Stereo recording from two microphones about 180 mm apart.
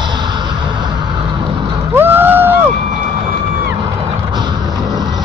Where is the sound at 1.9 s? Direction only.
10° right (ahead or behind).